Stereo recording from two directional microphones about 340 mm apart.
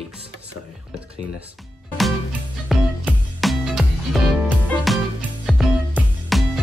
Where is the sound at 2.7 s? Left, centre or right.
Centre.